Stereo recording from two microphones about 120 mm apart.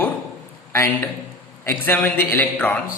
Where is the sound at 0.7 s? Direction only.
20° left (ahead or behind).